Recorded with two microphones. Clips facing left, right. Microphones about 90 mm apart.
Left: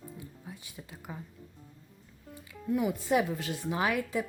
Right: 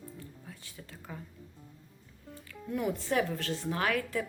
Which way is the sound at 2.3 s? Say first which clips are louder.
Left 6 dB; centre (ahead or behind).